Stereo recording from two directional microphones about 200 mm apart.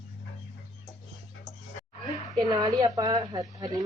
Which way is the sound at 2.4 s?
20° right (ahead or behind).